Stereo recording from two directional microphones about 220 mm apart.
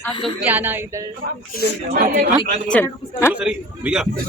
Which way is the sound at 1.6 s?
45° right (ahead or behind).